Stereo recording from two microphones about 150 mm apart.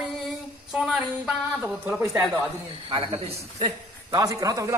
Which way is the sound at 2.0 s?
20° right (ahead or behind).